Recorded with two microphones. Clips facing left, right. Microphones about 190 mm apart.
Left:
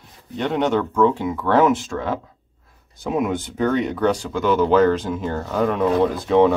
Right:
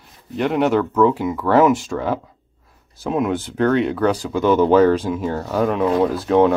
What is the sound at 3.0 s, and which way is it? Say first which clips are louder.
Speech: right 2 dB; centre (ahead or behind).